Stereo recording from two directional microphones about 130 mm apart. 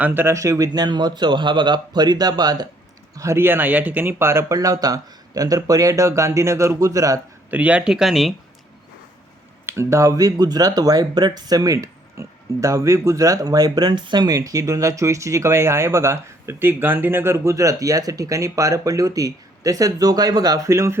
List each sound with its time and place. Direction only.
0.0 s speech: 15° right (ahead or behind); by 2.6 s 30° right (ahead or behind)
3.2 s speech: 20° right (ahead or behind)
7.5 s speech: 10° right (ahead or behind)
9.6 s speech: 20° right (ahead or behind)